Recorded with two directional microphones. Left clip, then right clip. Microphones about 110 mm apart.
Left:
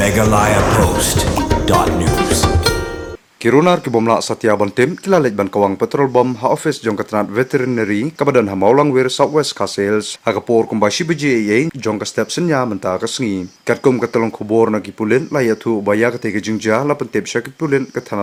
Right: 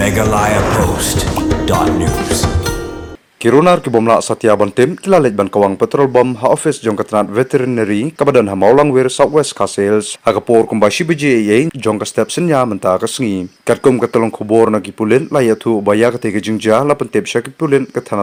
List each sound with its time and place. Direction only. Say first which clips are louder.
0.0 s speech: even; centre (ahead or behind)
3.4 s speech: right 3 dB; 15° right (ahead or behind)